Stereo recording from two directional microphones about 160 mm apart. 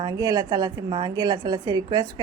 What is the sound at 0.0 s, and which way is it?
A woman's voice, 25° right (ahead or behind).